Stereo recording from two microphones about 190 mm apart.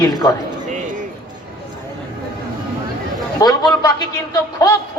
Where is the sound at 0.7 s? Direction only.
40° right (ahead or behind).